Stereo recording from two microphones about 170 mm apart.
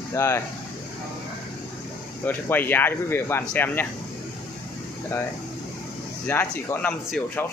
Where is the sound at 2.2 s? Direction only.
10° left (ahead or behind).